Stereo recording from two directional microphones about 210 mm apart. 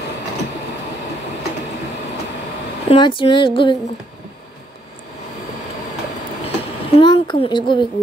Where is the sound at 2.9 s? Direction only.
25° left (ahead or behind).